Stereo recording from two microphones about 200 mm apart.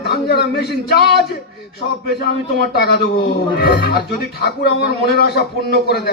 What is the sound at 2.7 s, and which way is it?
Speech, 55° left (ahead or behind).